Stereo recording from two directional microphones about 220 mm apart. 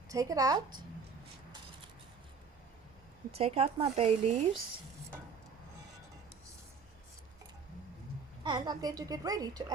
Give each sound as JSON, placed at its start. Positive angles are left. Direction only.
{"t": 0.1, "sound": "a woman's voice", "side_deg": -15}
{"t": 3.3, "sound": "speech", "side_deg": -25}
{"t": 8.4, "sound": "a woman's voice", "side_deg": -20}